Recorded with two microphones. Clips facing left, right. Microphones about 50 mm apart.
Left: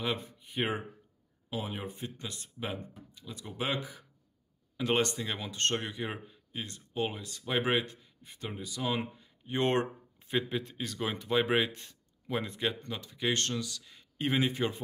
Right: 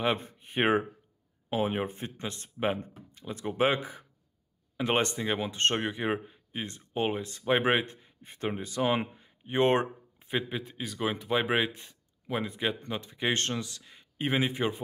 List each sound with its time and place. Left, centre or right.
0.0 s speech: right; by 12.9 s centre
12.9 s speech: right